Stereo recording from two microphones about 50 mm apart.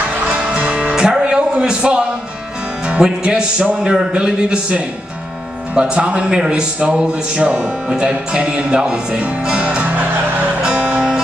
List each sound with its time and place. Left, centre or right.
0.5 s music: centre
1.2 s a sound: centre
3.0 s a man's voice: centre
10.6 s music: right